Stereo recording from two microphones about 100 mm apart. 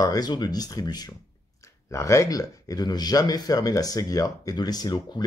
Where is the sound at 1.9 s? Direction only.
30° left (ahead or behind).